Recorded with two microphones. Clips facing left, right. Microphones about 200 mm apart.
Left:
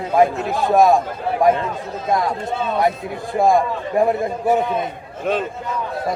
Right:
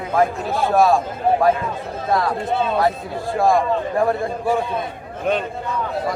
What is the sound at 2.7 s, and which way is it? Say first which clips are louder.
A man's voice: even; 20° left (ahead or behind).